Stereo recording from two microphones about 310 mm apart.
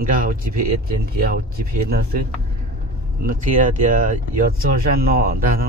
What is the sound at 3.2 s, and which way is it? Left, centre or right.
A man's voice, right.